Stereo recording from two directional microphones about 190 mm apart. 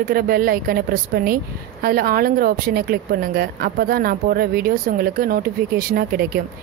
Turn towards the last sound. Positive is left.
turn(degrees=-55)  # may be behind; listen again after turning